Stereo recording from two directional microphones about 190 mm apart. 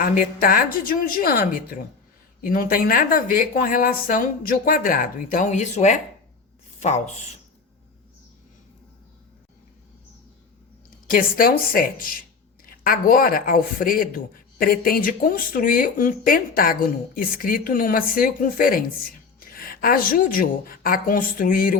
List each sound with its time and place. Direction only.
0.0 s speech: 45° left (ahead or behind)
11.1 s a woman's voice: 50° left (ahead or behind)